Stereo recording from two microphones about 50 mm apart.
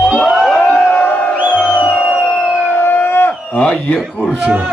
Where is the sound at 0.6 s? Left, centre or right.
Left.